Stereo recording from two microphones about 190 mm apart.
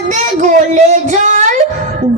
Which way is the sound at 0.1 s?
40° right (ahead or behind).